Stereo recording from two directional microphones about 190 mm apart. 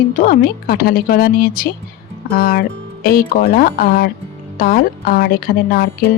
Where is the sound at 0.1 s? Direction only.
45° left (ahead or behind).